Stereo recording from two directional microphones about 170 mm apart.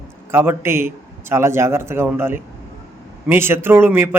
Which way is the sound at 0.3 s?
15° right (ahead or behind).